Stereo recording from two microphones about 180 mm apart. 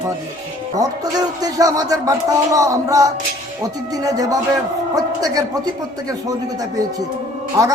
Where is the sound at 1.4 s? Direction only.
20° right (ahead or behind).